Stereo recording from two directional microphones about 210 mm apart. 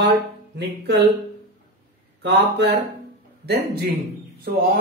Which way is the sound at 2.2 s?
55° right (ahead or behind).